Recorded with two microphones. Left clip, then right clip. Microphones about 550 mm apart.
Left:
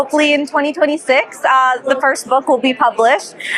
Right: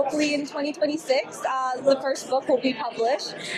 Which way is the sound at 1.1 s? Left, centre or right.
Left.